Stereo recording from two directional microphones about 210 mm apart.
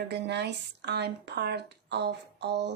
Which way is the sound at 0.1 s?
55° right (ahead or behind).